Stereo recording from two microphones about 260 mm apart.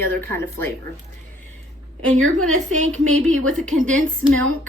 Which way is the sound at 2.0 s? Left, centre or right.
Right.